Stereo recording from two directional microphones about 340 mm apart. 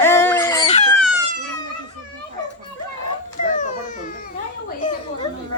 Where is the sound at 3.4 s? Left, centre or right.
Left.